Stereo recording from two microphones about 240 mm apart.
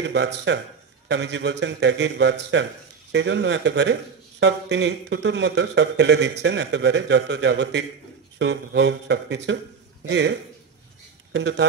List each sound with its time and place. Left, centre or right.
0.0 s a man's voice: right
11.3 s a man's voice: right